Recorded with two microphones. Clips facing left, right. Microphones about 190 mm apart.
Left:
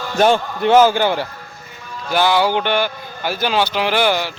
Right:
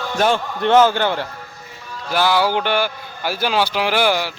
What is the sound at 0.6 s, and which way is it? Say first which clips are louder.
Speech: left 1 dB; 10° left (ahead or behind).